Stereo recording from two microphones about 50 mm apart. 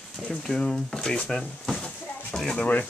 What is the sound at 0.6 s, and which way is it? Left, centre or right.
Speech, centre.